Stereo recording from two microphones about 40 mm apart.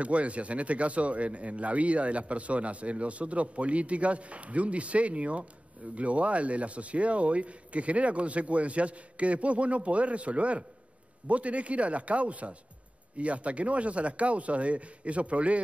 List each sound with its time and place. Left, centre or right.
0.0 s speech: right